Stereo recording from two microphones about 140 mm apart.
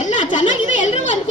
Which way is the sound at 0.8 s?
60° left (ahead or behind).